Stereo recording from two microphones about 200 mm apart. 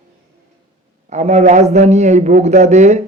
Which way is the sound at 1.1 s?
35° right (ahead or behind).